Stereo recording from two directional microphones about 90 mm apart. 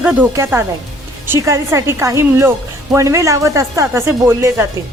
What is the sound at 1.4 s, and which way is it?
A woman's voice, 30° right (ahead or behind).